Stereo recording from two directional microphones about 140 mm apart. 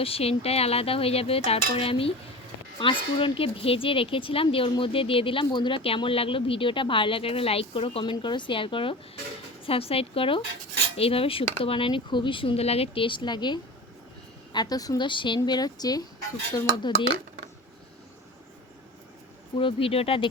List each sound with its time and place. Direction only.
0.0 s cutlery: 45° left (ahead or behind)
2.7 s speech: 40° left (ahead or behind)
9.6 s cutlery: 45° left (ahead or behind)
11.6 s a woman's voice: 40° left (ahead or behind)
19.5 s speech: 40° left (ahead or behind)